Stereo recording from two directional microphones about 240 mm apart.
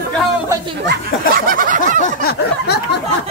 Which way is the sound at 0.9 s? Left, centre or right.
Right.